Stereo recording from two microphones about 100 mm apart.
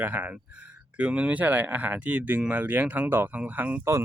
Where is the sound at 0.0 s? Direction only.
15° right (ahead or behind).